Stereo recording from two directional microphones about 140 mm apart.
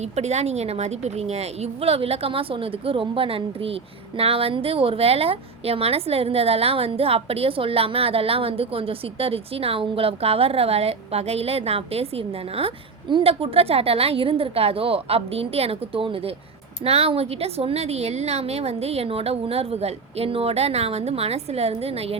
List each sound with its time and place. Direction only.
0.0 s a woman's voice: 50° right (ahead or behind)